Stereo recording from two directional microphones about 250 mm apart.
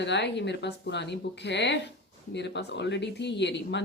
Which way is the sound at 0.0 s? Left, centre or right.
Left.